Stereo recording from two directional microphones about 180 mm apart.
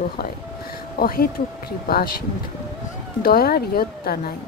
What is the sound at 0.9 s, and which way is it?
A woman's voice, 55° left (ahead or behind).